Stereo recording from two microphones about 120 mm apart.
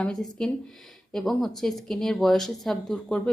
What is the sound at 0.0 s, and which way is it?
A woman's voice, 5° left (ahead or behind).